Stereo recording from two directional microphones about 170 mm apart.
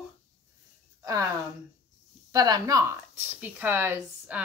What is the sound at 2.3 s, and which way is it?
Speech, 25° right (ahead or behind).